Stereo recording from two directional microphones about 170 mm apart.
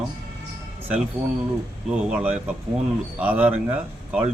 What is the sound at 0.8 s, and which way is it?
A man's voice, 10° right (ahead or behind).